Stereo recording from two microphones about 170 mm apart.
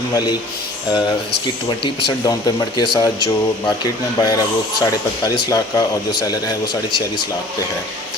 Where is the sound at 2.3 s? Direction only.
25° left (ahead or behind).